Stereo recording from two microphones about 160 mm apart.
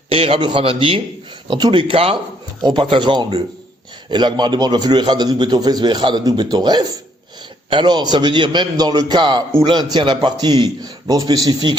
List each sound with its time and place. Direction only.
0.1 s a man's voice: 35° right (ahead or behind)